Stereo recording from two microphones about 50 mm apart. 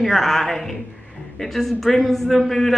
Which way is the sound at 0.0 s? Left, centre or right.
Centre.